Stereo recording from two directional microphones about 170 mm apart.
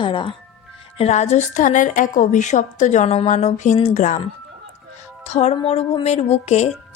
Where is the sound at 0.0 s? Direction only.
30° left (ahead or behind).